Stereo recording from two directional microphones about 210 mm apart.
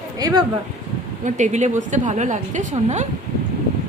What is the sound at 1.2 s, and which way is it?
A woman's voice, 35° right (ahead or behind).